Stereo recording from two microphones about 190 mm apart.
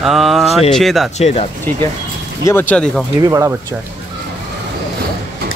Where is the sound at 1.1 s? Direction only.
35° left (ahead or behind).